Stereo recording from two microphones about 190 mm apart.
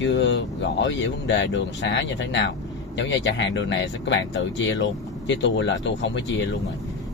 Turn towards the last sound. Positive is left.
turn(degrees=70)  # may be behind; listen again after turning